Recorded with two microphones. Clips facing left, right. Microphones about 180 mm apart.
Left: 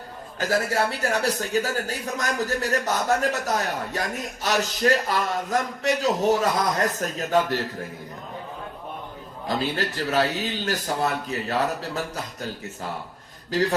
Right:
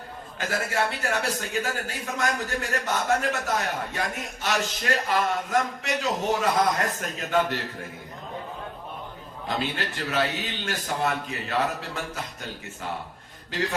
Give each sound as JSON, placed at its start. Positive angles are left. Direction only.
{"t": 0.3, "sound": "a man's voice", "side_deg": 40}
{"t": 9.5, "sound": "a man's voice", "side_deg": 40}
{"t": 13.5, "sound": "a man's voice", "side_deg": 40}